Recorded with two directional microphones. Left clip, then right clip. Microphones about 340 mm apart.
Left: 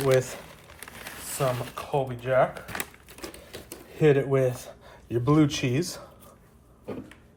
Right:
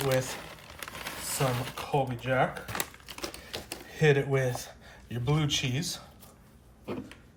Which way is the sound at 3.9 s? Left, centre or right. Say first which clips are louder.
Left 4 dB; centre.